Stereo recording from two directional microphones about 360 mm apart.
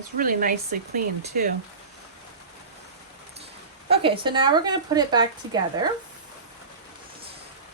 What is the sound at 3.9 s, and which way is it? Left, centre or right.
Speech, centre.